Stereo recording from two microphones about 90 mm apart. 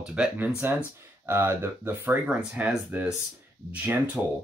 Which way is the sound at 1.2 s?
30° right (ahead or behind).